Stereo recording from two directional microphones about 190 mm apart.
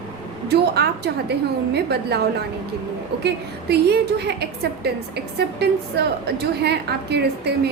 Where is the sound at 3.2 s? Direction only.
60° right (ahead or behind).